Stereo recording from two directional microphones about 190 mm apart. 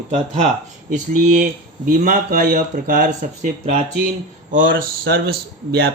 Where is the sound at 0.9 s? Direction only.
40° right (ahead or behind).